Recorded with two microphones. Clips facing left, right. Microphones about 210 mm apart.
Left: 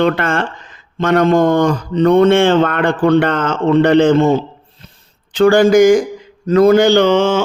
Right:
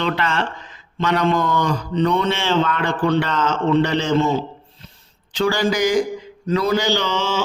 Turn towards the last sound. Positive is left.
turn(degrees=55)  # may be behind; listen again after turning